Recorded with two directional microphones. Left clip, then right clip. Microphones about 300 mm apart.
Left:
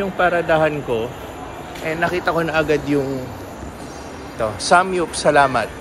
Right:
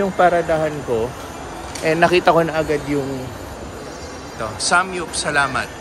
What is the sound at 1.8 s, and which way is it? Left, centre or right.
A man's voice, right.